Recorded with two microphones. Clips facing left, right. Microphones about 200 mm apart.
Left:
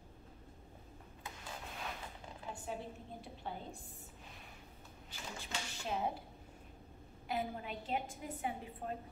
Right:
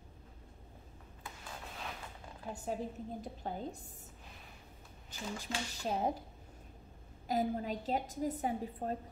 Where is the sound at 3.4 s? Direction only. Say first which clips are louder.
Right 4 dB; 45° right (ahead or behind).